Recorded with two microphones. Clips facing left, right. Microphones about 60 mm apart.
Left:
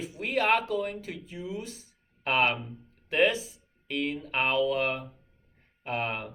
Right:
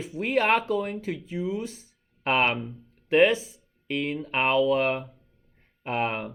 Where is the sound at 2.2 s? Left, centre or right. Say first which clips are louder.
Right 2 dB; right.